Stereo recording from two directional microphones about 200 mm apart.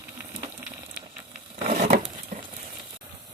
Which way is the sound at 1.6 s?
40° right (ahead or behind).